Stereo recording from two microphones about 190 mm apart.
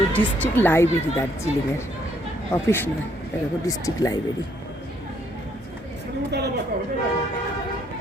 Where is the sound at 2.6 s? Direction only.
10° left (ahead or behind).